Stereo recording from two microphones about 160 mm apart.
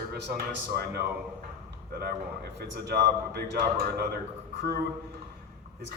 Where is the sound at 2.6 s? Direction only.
80° right.